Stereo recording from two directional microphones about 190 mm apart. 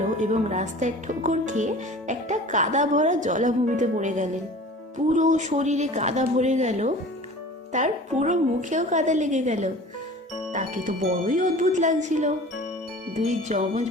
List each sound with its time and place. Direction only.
0.2 s speech: 40° right (ahead or behind)